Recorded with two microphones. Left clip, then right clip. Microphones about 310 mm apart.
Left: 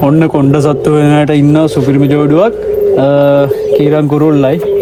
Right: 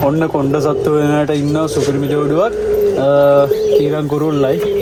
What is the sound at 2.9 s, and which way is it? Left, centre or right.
Bird, left.